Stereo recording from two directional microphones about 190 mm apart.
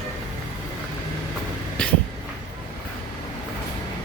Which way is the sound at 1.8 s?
5° left (ahead or behind).